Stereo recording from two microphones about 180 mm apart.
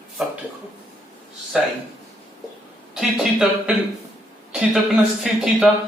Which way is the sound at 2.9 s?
5° right (ahead or behind).